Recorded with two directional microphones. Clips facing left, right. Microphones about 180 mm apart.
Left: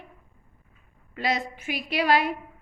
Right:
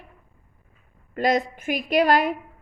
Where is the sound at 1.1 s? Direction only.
50° right (ahead or behind).